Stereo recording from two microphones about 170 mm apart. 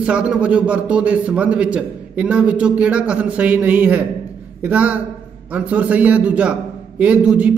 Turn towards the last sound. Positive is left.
turn(degrees=-5)  # may be behind; listen again after turning